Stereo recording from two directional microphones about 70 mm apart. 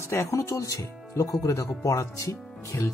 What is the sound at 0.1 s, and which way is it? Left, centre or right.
Speech, left.